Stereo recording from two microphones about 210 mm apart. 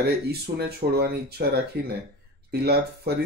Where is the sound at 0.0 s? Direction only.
50° right (ahead or behind).